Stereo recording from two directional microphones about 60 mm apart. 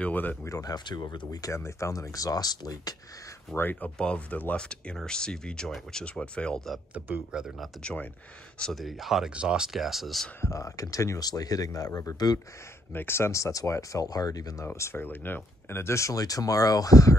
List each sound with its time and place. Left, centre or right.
0.0 s speech: left
0.5 s speech: left
1.5 s speech: left
3.5 s speech: left
4.0 s speech: left
4.6 s speech: centre
7.3 s speech: centre
7.8 s speech: left
8.7 s speech: centre
9.3 s speech: centre
10.4 s speech: left
12.9 s speech: left
14.7 s speech: left
16.2 s speech: left